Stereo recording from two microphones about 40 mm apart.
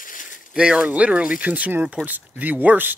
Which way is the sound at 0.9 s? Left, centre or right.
Right.